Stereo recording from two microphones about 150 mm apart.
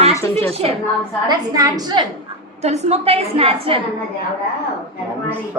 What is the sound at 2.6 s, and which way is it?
A woman's voice, 50° right (ahead or behind).